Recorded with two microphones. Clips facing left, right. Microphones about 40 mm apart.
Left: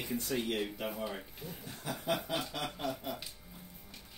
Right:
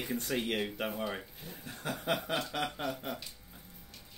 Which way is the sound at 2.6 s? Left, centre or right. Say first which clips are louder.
Right 4 dB; right.